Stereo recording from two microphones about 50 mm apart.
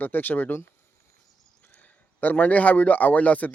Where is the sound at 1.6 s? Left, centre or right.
Left.